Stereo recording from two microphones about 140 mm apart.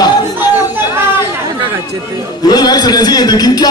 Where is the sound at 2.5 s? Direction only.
30° left (ahead or behind).